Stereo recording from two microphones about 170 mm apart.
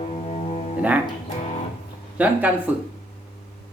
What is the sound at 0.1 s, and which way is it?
Music, 40° left (ahead or behind).